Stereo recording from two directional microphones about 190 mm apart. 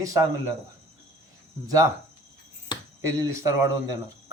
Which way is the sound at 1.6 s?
15° right (ahead or behind).